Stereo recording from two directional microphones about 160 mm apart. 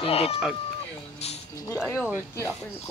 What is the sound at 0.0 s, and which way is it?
Speech, 35° left (ahead or behind).